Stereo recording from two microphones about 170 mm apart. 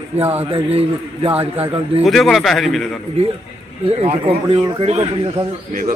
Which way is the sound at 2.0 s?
Centre (ahead or behind).